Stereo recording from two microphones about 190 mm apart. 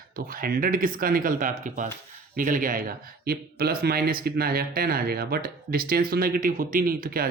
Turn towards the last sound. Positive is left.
turn(degrees=-50)  # may be behind; listen again after turning